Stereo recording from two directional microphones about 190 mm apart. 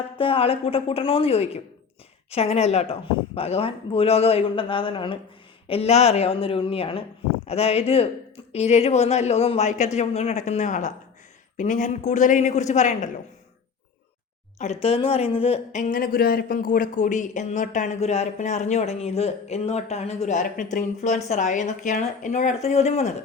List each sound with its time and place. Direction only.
0.2 s speech: 30° left (ahead or behind)
14.6 s speech: 35° left (ahead or behind)